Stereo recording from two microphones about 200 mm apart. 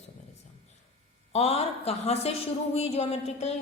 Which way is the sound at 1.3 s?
30° left (ahead or behind).